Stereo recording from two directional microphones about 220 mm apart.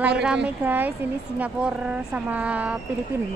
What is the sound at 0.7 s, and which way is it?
Speech, 10° right (ahead or behind).